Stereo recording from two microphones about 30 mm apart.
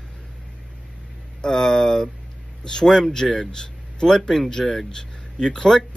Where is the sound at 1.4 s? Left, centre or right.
Centre.